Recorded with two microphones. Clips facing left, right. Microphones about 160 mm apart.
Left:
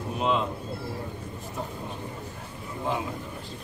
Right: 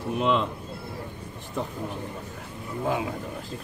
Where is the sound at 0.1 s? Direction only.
60° right (ahead or behind).